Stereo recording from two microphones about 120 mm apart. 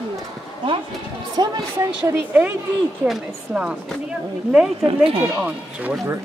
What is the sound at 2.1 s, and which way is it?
Speech, 15° right (ahead or behind).